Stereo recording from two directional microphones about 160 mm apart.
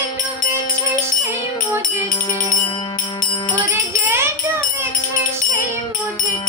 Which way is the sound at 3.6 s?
10° right (ahead or behind).